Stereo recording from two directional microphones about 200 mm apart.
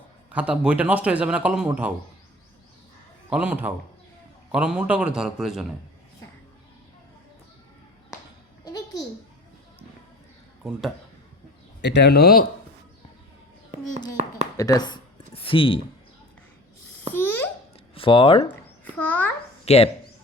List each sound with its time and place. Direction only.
0.3 s a man's voice: 5° right (ahead or behind)
3.2 s a man's voice: 5° right (ahead or behind)
8.6 s babbling: 20° left (ahead or behind)
10.6 s speech: centre (ahead or behind)
11.8 s speech: 60° left (ahead or behind)
14.5 s speech: 15° left (ahead or behind)
17.2 s babbling: 10° left (ahead or behind)
17.9 s speech: 25° left (ahead or behind)
18.9 s a child's voice: 10° left (ahead or behind)
19.6 s chopping: 30° left (ahead or behind)